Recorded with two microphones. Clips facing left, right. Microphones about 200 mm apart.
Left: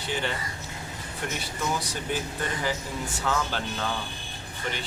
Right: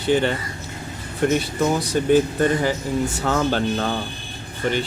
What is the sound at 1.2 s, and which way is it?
Speech, 45° right (ahead or behind).